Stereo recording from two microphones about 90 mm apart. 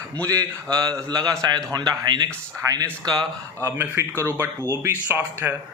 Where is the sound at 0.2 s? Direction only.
40° right (ahead or behind).